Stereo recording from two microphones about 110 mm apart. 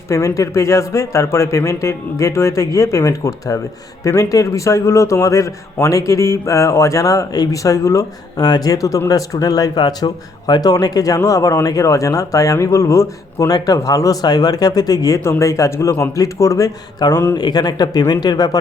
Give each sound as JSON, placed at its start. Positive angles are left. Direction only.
{"t": 0.1, "sound": "a man's voice", "side_deg": 30}